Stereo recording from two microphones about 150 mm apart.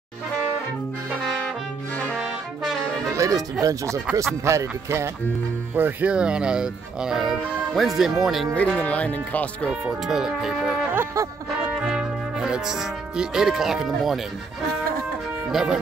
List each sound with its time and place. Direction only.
2.1 s brass instrument: centre (ahead or behind)
3.2 s speech: 25° right (ahead or behind); by 8.5 s centre (ahead or behind)
8.5 s speech: 10° left (ahead or behind)
9.8 s speech: 5° right (ahead or behind)
15.5 s speech: 5° right (ahead or behind)